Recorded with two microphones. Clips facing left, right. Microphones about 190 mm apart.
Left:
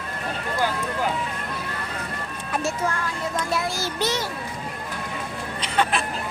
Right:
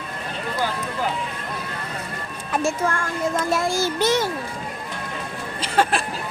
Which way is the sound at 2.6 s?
50° right (ahead or behind).